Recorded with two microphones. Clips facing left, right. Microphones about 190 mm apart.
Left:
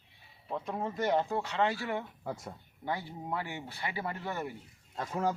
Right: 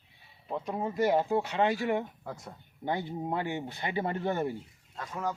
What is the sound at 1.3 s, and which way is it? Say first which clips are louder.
Speech: right 4 dB; 15° right (ahead or behind).